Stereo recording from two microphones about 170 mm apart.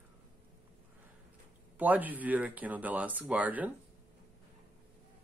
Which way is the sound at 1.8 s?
10° right (ahead or behind).